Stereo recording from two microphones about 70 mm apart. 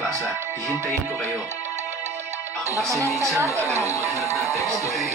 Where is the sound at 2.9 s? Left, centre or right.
Right.